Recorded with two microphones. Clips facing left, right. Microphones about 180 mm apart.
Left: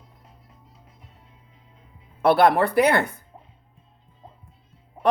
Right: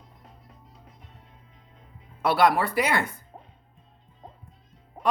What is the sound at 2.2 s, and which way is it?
Speech, 55° left (ahead or behind).